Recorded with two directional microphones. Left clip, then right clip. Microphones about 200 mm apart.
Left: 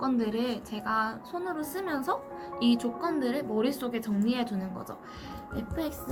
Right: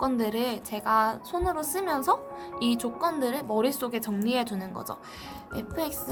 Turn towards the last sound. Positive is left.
turn(degrees=-55)  # may be behind; listen again after turning